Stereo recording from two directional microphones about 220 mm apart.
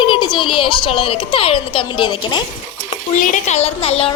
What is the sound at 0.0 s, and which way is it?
A woman's voice, 20° left (ahead or behind).